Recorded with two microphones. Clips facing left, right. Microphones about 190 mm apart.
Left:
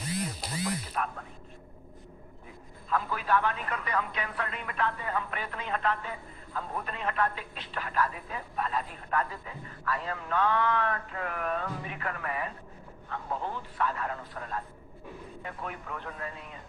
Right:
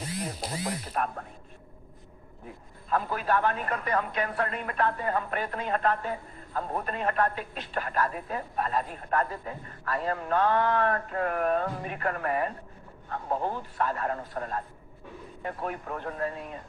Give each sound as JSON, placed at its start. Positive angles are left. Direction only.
{"t": 0.6, "sound": "speech", "side_deg": -45}
{"t": 2.9, "sound": "speech", "side_deg": -45}